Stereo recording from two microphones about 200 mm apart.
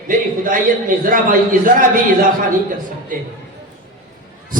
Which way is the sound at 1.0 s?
45° right (ahead or behind).